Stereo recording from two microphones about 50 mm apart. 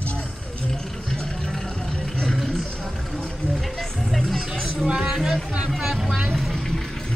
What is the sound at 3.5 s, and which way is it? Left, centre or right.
Vehicle, centre.